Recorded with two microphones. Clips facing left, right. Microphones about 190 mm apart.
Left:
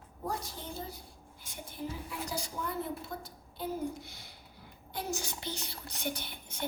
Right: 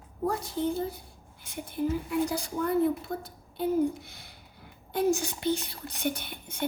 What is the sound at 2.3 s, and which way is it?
A woman's voice, 55° right (ahead or behind).